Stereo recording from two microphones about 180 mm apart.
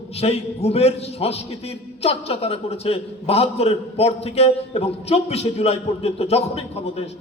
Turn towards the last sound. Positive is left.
turn(degrees=35)  # may be behind; listen again after turning